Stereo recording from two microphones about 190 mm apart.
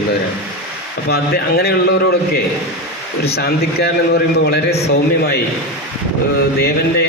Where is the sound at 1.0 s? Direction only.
55° left (ahead or behind).